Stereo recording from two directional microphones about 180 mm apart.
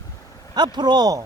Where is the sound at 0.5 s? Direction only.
25° right (ahead or behind).